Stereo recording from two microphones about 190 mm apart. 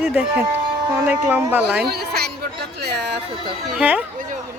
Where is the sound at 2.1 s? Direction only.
55° right (ahead or behind).